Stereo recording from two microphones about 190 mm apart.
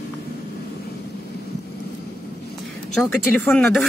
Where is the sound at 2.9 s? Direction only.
Centre (ahead or behind).